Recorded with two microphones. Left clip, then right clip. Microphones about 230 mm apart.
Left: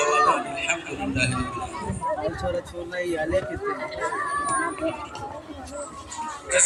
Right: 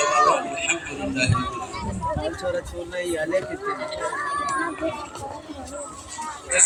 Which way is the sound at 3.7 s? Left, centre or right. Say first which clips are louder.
Right 1 dB; right.